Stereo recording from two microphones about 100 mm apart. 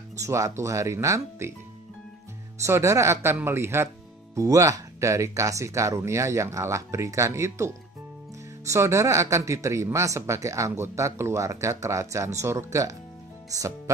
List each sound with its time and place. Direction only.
0.1 s speech: 30° right (ahead or behind)
2.6 s speech: 30° right (ahead or behind)